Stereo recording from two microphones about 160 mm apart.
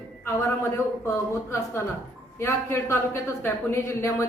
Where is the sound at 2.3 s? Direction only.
15° left (ahead or behind).